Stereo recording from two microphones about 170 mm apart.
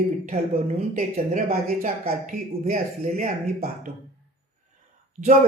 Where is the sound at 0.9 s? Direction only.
50° right (ahead or behind).